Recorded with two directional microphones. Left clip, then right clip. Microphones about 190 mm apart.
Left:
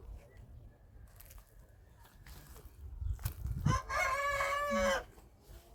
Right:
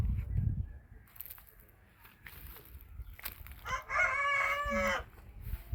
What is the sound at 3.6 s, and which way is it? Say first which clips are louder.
Chicken: right 3 dB; 35° left (ahead or behind).